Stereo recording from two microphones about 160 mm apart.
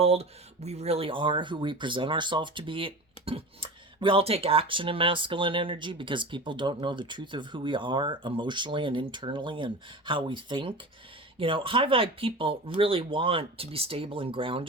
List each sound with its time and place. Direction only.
0.0 s speech: 40° right (ahead or behind)